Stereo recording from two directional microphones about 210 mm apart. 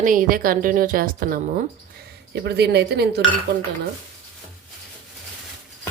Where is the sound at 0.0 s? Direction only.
40° right (ahead or behind).